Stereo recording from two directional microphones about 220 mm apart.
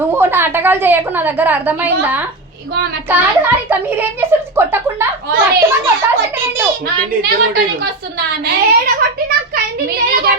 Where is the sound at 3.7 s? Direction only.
10° right (ahead or behind).